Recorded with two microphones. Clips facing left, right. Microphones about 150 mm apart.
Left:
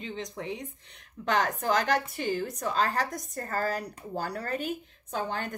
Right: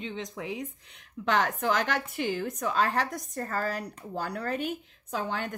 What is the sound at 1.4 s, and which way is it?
A woman's voice, 40° left (ahead or behind).